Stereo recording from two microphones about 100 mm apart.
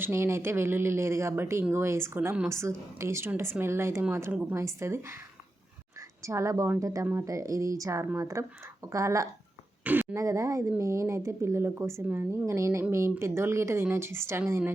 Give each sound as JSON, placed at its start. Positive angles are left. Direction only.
{"t": 0.0, "sound": "a woman's voice", "side_deg": -25}
{"t": 4.5, "sound": "a woman's voice", "side_deg": -30}
{"t": 9.8, "sound": "speech", "side_deg": -20}
{"t": 10.2, "sound": "speech", "side_deg": -30}